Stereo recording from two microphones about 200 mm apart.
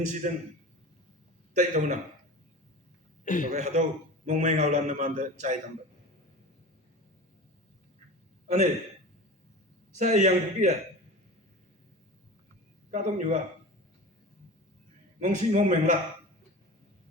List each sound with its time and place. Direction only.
0.1 s a man's voice: 40° right (ahead or behind)
1.5 s a man's voice: 35° right (ahead or behind)
3.2 s a man's voice: 40° left (ahead or behind)
3.5 s a man's voice: 35° right (ahead or behind)
10.0 s a man's voice: 35° right (ahead or behind)
12.9 s a man's voice: 40° right (ahead or behind)
15.2 s a man's voice: 40° right (ahead or behind)